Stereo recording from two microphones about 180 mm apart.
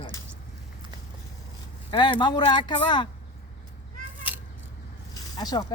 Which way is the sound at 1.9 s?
25° left (ahead or behind).